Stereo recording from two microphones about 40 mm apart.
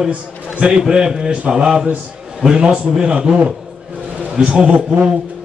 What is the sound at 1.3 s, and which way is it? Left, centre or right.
A man's voice, right.